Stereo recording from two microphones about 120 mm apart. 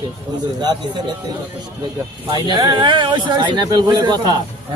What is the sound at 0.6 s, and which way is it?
Speech, 35° right (ahead or behind).